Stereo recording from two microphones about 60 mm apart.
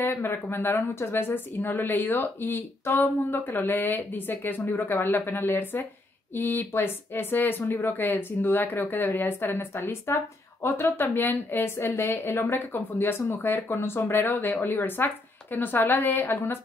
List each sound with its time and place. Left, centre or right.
0.0 s speech: left
11.8 s a woman's voice: left
16.2 s a woman's voice: left